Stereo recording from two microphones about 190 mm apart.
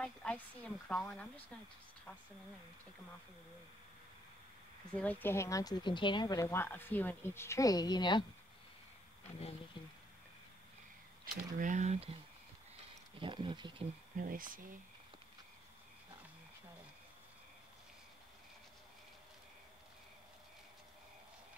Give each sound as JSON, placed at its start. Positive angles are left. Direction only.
{"t": 0.0, "sound": "a woman's voice", "side_deg": 5}
{"t": 4.9, "sound": "a woman's voice", "side_deg": 10}
{"t": 11.5, "sound": "speech", "side_deg": -40}
{"t": 13.2, "sound": "speech", "side_deg": -25}
{"t": 14.1, "sound": "speech", "side_deg": -45}